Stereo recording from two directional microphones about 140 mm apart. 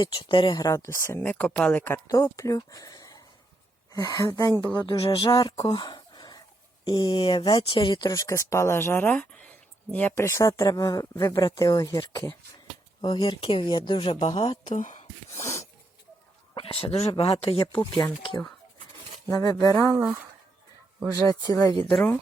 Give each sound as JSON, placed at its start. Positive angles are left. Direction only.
{"t": 0.0, "sound": "speech", "side_deg": 35}
{"t": 0.6, "sound": "speech", "side_deg": 20}
{"t": 2.0, "sound": "speech", "side_deg": 25}
{"t": 13.0, "sound": "speech", "side_deg": 35}
{"t": 14.7, "sound": "speech", "side_deg": 60}
{"t": 15.3, "sound": "speech", "side_deg": 20}
{"t": 16.6, "sound": "speech", "side_deg": 40}
{"t": 19.9, "sound": "speech", "side_deg": -15}
{"t": 21.5, "sound": "speech", "side_deg": 20}